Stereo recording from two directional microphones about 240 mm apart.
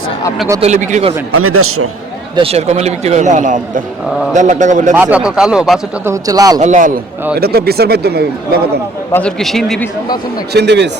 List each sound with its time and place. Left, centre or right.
0.3 s speech: centre
0.6 s a man's voice: right
1.3 s a man's voice: right
2.3 s a man's voice: right
4.9 s speech: centre
6.2 s speech: centre
6.6 s speech: right
9.1 s speech: centre
10.5 s speech: right